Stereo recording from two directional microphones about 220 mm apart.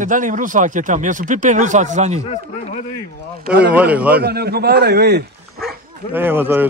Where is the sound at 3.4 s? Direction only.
50° right (ahead or behind).